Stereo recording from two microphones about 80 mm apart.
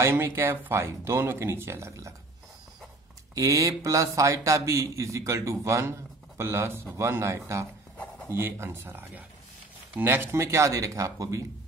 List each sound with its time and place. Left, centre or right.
0.0 s a man's voice: right
3.3 s a man's voice: right